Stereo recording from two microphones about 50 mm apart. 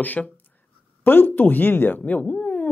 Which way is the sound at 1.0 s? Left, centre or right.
Left.